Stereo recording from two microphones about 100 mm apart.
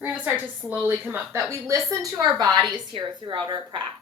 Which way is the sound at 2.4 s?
40° right (ahead or behind).